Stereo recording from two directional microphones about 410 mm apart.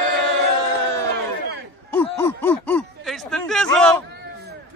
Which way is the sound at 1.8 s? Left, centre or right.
Centre.